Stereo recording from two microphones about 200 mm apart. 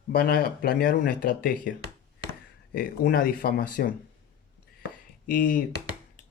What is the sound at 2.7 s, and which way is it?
Speech, 50° left (ahead or behind).